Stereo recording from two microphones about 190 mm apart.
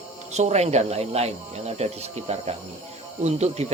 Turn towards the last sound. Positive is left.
turn(degrees=-35)  # may be behind; listen again after turning